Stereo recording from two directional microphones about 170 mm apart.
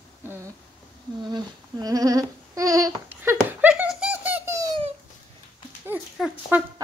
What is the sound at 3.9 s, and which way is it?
Baby laughter, 5° right (ahead or behind).